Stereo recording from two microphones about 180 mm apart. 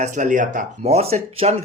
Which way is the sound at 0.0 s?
45° right (ahead or behind).